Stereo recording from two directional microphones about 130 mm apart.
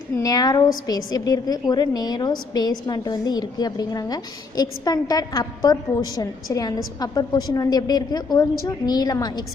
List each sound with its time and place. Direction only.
0.2 s a woman's voice: 30° left (ahead or behind)